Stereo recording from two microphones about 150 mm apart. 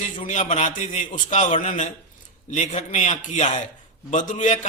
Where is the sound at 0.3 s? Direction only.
55° left (ahead or behind).